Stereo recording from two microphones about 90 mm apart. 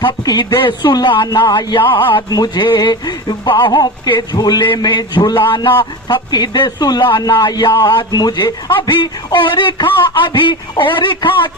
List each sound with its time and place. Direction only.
0.0 s speech: 50° left (ahead or behind); by 2.2 s 65° left (ahead or behind)
2.3 s speech: 55° left (ahead or behind)
4.6 s speech: 60° left (ahead or behind)
8.7 s speech: 60° left (ahead or behind)